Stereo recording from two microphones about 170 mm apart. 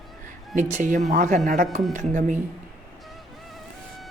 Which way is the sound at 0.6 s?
45° right (ahead or behind).